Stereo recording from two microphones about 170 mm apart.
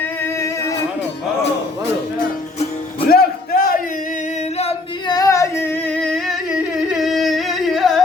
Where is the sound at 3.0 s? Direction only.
60° left (ahead or behind).